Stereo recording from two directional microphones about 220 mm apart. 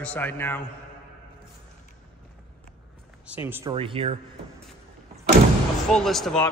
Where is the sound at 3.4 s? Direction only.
10° right (ahead or behind).